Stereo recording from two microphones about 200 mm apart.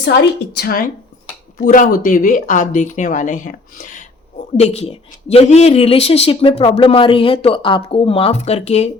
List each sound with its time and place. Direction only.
0.0 s a woman's voice: 55° left (ahead or behind); by 8.9 s 35° left (ahead or behind)